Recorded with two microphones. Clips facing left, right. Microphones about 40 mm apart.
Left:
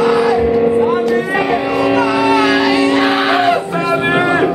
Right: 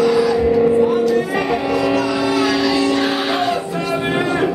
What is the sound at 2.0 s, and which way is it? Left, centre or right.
Music, left.